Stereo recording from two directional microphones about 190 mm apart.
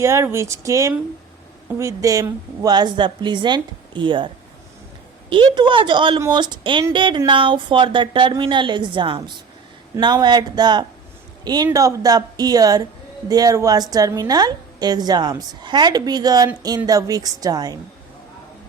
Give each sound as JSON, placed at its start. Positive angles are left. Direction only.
{"t": 0.0, "sound": "a woman's voice", "side_deg": -15}
{"t": 5.3, "sound": "a woman's voice", "side_deg": -25}